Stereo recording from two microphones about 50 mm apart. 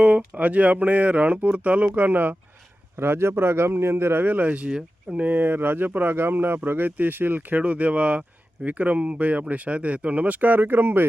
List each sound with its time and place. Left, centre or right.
0.0 s speech: right
3.0 s a man's voice: right
4.2 s speech: right
7.6 s speech: right